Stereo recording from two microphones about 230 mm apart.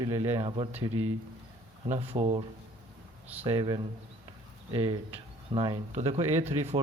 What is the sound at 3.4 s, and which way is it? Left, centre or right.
Speech, centre.